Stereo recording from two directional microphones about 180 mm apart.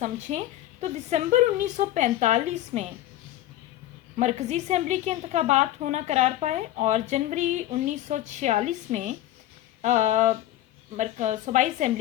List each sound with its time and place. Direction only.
0.0 s a woman's voice: 40° right (ahead or behind)
4.2 s a woman's voice: 40° right (ahead or behind)